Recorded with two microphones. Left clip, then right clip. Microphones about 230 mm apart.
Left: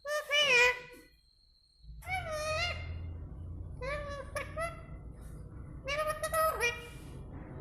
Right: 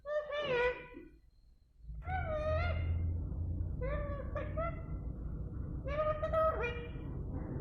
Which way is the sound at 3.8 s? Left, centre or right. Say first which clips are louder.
Left 3 dB; left.